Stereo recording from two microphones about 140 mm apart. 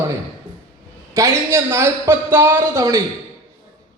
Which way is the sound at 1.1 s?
20° right (ahead or behind).